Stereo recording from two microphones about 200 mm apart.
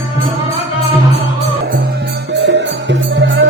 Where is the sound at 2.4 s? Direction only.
60° right (ahead or behind).